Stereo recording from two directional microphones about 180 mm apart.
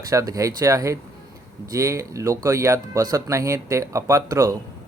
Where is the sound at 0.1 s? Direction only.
20° right (ahead or behind).